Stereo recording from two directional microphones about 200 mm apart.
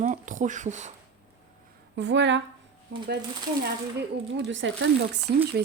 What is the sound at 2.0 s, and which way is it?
Speech, 65° right (ahead or behind).